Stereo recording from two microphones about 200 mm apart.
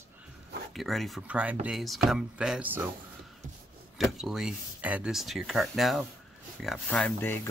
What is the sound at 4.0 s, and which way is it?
Speech, centre (ahead or behind).